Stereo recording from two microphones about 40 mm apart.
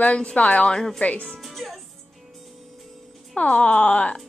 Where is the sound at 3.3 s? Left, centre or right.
Left.